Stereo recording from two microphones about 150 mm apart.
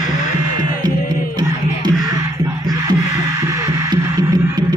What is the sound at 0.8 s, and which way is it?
Music, 30° right (ahead or behind).